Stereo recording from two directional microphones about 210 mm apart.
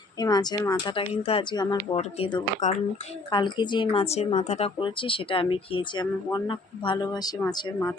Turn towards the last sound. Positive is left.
turn(degrees=15)  # may be behind; listen again after turning